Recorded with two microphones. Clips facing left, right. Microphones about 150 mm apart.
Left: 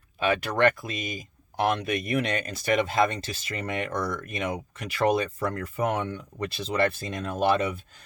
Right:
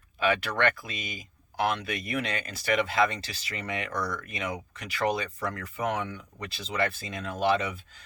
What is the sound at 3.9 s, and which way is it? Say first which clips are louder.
Speech: left 1 dB; 25° left (ahead or behind).